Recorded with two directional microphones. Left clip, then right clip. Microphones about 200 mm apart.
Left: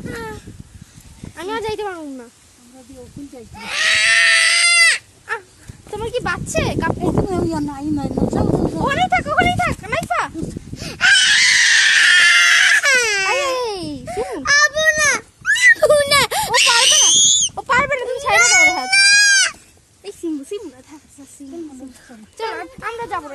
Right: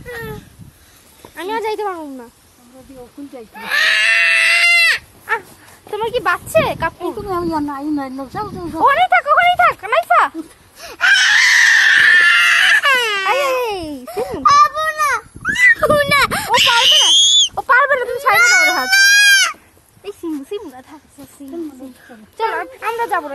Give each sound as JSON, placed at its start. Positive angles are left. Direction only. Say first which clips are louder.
{"t": 0.1, "sound": "a sound", "louder": "right 2 dB", "side_deg": -25}
{"t": 1.3, "sound": "speech", "louder": "right 3 dB", "side_deg": -15}
{"t": 3.5, "sound": "goat", "louder": "right 3 dB", "side_deg": -15}
{"t": 5.3, "sound": "dog", "louder": "right 6 dB", "side_deg": -5}
{"t": 5.9, "sound": "speech", "louder": "right 5 dB", "side_deg": -10}
{"t": 7.2, "sound": "speech", "louder": "right 2 dB", "side_deg": 25}
{"t": 8.8, "sound": "speech", "louder": "right 8 dB", "side_deg": -10}
{"t": 10.8, "sound": "chicken", "louder": "right 1 dB", "side_deg": -25}
{"t": 12.0, "sound": "crying", "louder": "right 1 dB", "side_deg": -10}
{"t": 17.5, "sound": "chicken", "louder": "right 4 dB", "side_deg": -15}
{"t": 20.0, "sound": "a sound", "louder": "right 1 dB", "side_deg": -15}
{"t": 22.4, "sound": "speech", "louder": "right 6 dB", "side_deg": -20}